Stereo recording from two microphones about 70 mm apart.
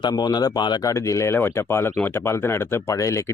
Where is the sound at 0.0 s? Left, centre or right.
Left.